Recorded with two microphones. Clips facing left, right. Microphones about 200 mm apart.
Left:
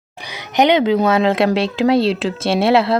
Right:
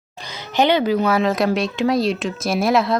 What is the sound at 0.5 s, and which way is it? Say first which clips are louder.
Speech: left 3 dB; 20° left (ahead or behind).